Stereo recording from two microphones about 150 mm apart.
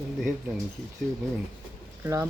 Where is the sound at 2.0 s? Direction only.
15° right (ahead or behind).